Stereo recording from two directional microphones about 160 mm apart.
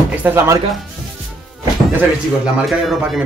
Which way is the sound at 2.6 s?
Centre (ahead or behind).